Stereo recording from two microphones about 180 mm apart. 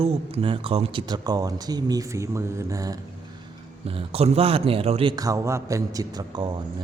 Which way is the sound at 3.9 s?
30° right (ahead or behind).